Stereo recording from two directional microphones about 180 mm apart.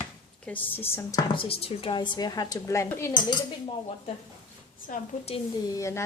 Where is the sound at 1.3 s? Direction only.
30° left (ahead or behind); by 3.1 s 15° left (ahead or behind).